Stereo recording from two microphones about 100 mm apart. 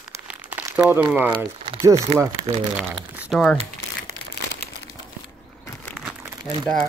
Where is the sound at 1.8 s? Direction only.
30° right (ahead or behind).